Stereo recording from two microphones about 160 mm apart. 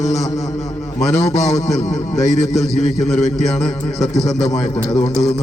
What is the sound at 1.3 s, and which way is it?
Speech, 45° left (ahead or behind).